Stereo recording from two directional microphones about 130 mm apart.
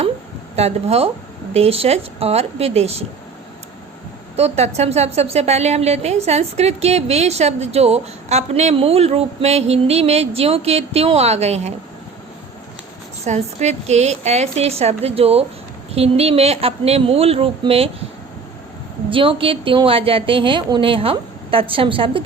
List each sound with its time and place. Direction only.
0.5 s a woman's voice: 55° right (ahead or behind)
4.4 s a woman's voice: 55° right (ahead or behind)
13.2 s a woman's voice: 60° right (ahead or behind)
19.1 s a woman's voice: 45° right (ahead or behind)